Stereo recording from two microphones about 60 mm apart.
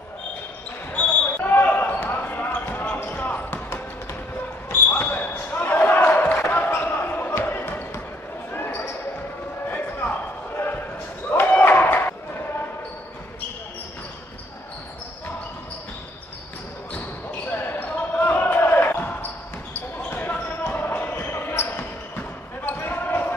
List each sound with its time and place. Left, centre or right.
0.9 s basketball bounce: left
4.6 s basketball bounce: left
5.0 s basketball bounce: left
7.2 s basketball bounce: left
7.5 s basketball bounce: left
11.3 s a sound: left
17.5 s basketball bounce: left